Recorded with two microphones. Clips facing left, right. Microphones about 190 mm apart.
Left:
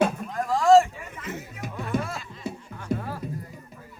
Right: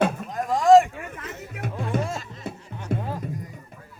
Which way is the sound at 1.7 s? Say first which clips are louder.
Right 1 dB; 30° right (ahead or behind).